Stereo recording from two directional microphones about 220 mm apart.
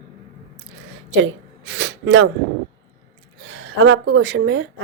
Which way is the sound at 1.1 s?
55° right (ahead or behind).